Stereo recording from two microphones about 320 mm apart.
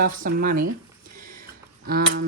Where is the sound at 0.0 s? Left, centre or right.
Right.